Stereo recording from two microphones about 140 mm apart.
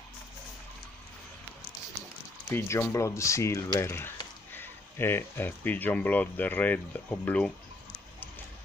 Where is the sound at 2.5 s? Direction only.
20° left (ahead or behind).